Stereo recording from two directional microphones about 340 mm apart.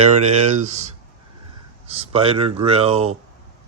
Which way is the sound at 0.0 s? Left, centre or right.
Centre.